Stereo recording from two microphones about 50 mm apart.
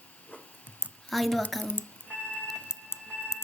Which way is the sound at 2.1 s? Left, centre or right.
Centre.